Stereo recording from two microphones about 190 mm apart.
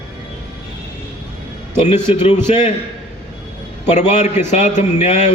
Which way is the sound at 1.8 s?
35° left (ahead or behind).